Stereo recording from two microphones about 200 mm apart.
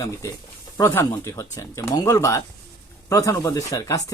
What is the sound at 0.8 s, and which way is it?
Speech, 10° left (ahead or behind).